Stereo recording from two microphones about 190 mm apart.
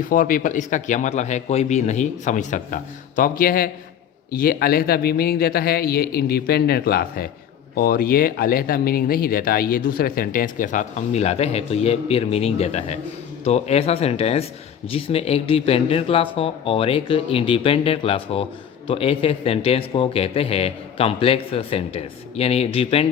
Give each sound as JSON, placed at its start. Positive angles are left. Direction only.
{"t": 0.1, "sound": "a man's voice", "side_deg": 45}